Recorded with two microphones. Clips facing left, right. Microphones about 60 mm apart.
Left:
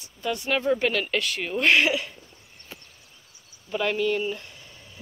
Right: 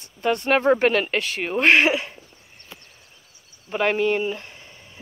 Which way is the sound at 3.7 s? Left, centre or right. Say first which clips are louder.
Right 4 dB; right.